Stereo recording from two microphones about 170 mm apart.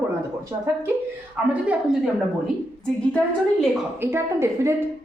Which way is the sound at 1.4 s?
10° right (ahead or behind).